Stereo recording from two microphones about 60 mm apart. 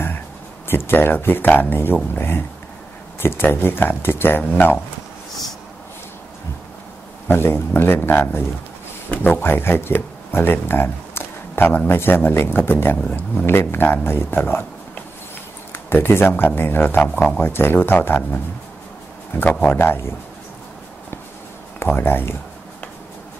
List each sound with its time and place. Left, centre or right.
0.7 s speech: left
7.2 s speech: left
12.9 s speech: left
13.5 s speech: left
15.7 s speech: left
19.6 s speech: left
21.8 s speech: left